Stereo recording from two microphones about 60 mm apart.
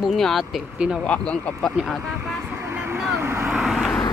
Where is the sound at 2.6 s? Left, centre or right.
Right.